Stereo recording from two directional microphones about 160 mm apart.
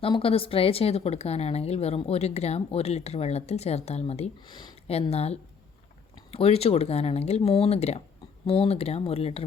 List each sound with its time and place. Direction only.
0.0 s speech: 35° left (ahead or behind)